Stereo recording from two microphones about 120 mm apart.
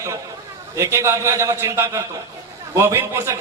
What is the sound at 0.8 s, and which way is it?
A man's voice, 25° right (ahead or behind).